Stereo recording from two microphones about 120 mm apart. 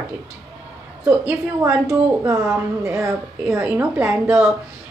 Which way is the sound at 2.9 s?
20° right (ahead or behind).